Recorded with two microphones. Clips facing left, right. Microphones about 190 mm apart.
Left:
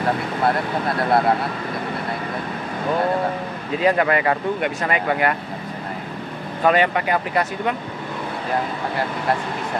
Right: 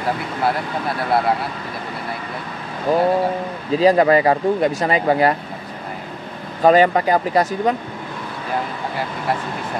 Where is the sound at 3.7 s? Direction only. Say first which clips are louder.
Right 5 dB; 30° right (ahead or behind).